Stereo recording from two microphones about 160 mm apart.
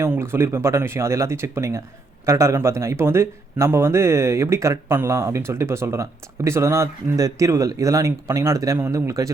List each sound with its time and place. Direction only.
0.0 s speech: 15° right (ahead or behind)